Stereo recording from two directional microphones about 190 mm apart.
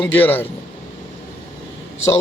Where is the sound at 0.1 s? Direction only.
10° left (ahead or behind).